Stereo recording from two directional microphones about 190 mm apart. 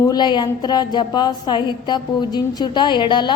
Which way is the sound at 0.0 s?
20° left (ahead or behind).